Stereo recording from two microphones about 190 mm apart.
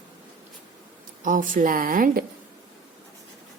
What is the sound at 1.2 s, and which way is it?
A woman's voice, 45° right (ahead or behind).